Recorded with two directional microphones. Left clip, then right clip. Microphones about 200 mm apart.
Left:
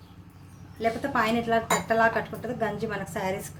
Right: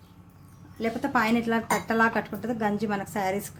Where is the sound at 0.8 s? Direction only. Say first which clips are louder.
Even; 40° right (ahead or behind).